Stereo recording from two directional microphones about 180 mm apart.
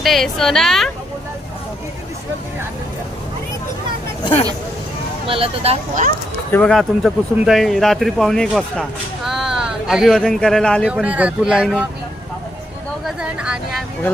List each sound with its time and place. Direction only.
0.0 s speech: centre (ahead or behind)
4.2 s speech: 30° left (ahead or behind)
5.2 s speech: 30° right (ahead or behind)
6.5 s speech: 5° left (ahead or behind)
10.8 s speech: 5° right (ahead or behind)
13.1 s speech: 5° right (ahead or behind)